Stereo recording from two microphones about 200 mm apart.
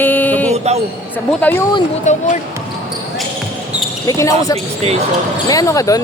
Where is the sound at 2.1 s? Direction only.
35° left (ahead or behind).